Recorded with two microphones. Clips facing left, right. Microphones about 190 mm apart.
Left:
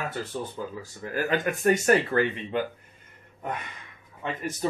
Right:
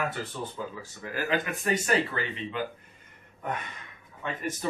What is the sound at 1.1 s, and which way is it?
Speech, 45° left (ahead or behind).